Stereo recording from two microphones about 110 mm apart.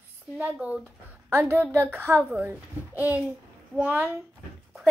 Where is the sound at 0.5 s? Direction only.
10° right (ahead or behind).